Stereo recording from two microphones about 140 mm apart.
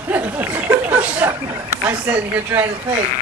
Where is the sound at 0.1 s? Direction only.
10° right (ahead or behind).